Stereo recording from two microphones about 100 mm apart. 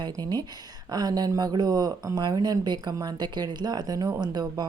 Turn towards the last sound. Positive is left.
turn(degrees=-45)  # may be behind; listen again after turning